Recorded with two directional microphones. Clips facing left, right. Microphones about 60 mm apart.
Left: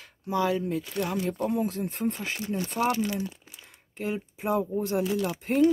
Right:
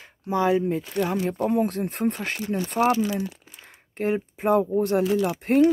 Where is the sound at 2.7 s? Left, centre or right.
Right.